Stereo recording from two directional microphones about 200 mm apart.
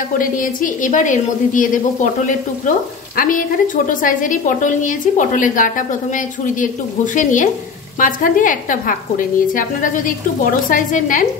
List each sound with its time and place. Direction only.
0.2 s a woman's voice: 45° left (ahead or behind)